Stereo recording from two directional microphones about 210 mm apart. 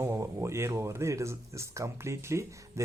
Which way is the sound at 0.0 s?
10° right (ahead or behind).